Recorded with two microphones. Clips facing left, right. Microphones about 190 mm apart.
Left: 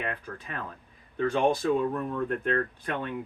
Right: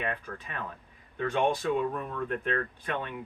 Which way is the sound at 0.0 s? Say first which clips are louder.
Even; 35° left (ahead or behind).